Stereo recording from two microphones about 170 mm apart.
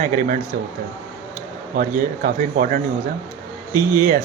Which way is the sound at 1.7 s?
55° right (ahead or behind).